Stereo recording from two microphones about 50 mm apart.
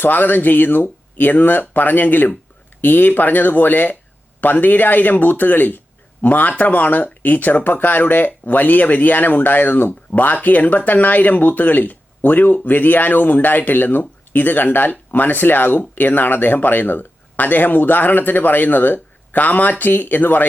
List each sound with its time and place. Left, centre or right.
0.0 s speech: left